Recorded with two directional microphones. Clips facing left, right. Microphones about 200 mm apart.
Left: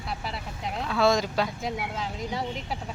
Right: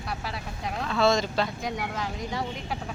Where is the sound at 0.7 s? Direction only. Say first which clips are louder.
Even; 5° left (ahead or behind).